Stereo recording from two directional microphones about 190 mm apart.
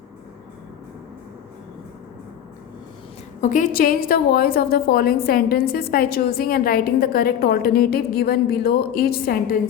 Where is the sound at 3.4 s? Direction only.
40° left (ahead or behind).